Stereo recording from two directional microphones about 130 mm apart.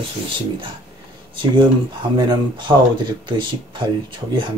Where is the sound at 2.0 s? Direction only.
40° right (ahead or behind).